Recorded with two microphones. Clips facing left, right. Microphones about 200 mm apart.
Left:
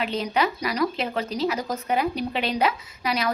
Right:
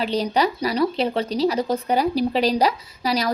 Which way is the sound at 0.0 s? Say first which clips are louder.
Right 4 dB; 35° right (ahead or behind).